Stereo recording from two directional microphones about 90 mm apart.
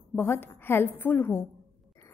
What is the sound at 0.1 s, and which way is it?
A woman's voice, 25° left (ahead or behind).